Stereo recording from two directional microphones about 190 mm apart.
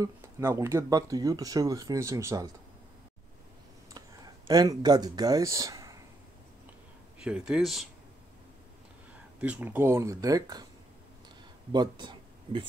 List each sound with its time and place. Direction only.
0.0 s speech: 15° right (ahead or behind)
4.5 s speech: 20° right (ahead or behind)
7.2 s speech: 5° right (ahead or behind)
9.4 s speech: 10° right (ahead or behind)
11.7 s speech: 25° right (ahead or behind)